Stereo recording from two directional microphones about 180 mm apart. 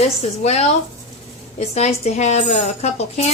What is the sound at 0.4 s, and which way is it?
Speech, 40° left (ahead or behind).